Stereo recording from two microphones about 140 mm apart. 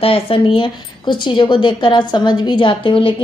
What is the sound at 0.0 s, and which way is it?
Speech, 40° left (ahead or behind).